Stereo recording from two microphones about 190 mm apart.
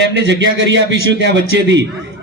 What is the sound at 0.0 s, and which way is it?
A man's voice, 70° right (ahead or behind).